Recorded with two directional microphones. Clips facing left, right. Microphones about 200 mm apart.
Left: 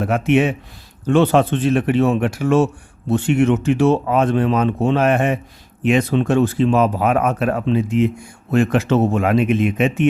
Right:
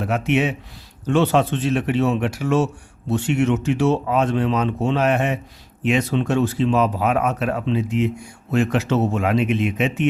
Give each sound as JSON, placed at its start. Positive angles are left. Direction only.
{"t": 0.0, "sound": "speech", "side_deg": 50}